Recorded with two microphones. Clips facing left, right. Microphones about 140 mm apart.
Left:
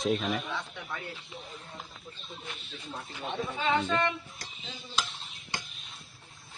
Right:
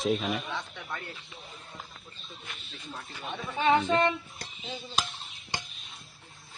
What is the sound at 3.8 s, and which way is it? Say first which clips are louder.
Speech: right 4 dB; 15° right (ahead or behind).